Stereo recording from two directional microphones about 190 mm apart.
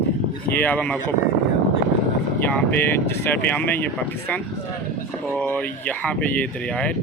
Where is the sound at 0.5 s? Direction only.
10° left (ahead or behind).